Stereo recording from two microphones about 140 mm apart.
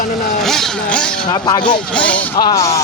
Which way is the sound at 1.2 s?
30° left (ahead or behind).